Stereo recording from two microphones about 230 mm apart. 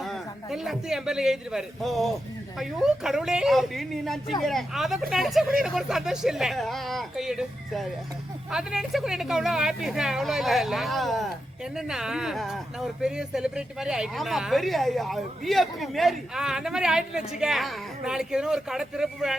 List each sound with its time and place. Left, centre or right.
0.0 s a man's voice: centre